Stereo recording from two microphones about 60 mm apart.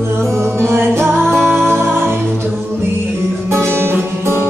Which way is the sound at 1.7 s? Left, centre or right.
Right.